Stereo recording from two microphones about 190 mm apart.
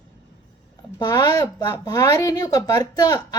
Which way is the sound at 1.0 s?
20° left (ahead or behind).